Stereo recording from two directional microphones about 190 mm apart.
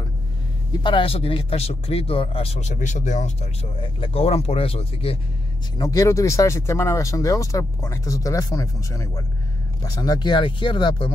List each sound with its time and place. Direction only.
0.8 s speech: 30° left (ahead or behind)
5.8 s speech: 20° left (ahead or behind)